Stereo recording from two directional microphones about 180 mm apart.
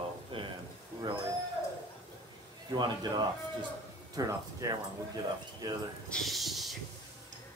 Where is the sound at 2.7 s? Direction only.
25° right (ahead or behind).